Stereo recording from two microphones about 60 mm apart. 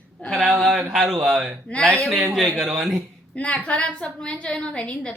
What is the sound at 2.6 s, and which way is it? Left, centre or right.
Speech, centre.